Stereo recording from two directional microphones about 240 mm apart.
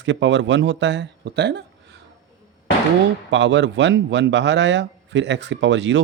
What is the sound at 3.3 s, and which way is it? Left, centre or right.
A man's voice, right.